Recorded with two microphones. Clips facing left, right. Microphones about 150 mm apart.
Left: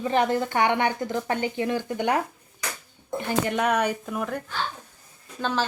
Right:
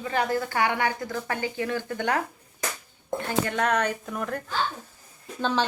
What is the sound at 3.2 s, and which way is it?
Speech, 15° left (ahead or behind).